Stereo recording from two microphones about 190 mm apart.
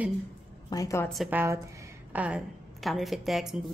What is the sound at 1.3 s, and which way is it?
A woman's voice, 10° right (ahead or behind).